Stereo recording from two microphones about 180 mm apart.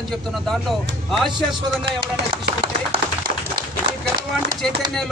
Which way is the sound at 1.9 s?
30° right (ahead or behind).